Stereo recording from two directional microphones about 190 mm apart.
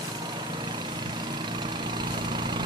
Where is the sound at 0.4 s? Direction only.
25° right (ahead or behind).